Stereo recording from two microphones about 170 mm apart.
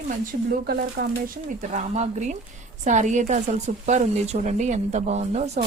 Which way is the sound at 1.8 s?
45° right (ahead or behind).